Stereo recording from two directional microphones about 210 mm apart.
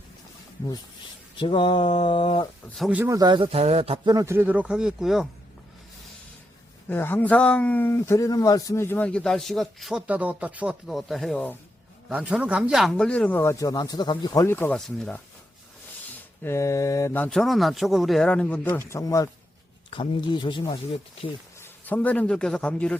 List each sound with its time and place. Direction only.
1.4 s speech: 25° left (ahead or behind)
2.7 s a man's voice: 5° right (ahead or behind)
6.8 s speech: 10° left (ahead or behind)
16.4 s speech: 15° left (ahead or behind)
21.6 s a man's voice: 5° left (ahead or behind)